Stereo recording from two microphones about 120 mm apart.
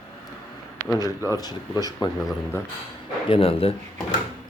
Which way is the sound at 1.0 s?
30° left (ahead or behind).